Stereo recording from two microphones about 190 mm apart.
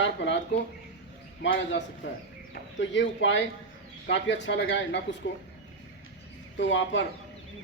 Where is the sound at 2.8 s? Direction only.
75° left (ahead or behind).